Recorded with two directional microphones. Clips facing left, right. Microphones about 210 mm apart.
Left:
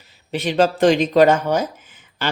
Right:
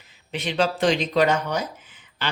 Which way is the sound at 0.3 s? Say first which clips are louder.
Left 6 dB; 45° left (ahead or behind).